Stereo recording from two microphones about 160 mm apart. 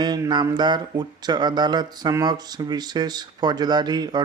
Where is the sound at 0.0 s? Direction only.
25° right (ahead or behind).